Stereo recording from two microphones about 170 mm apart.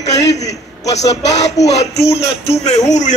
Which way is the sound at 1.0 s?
90° left.